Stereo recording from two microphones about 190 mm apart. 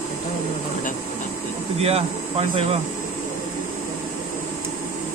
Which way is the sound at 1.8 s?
30° right (ahead or behind).